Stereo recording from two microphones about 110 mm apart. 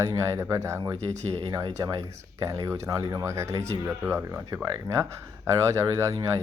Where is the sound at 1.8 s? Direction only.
35° right (ahead or behind).